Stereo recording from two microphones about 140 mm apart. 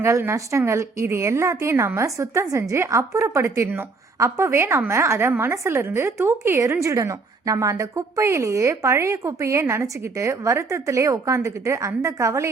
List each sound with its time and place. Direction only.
0.0 s a woman's voice: 20° right (ahead or behind)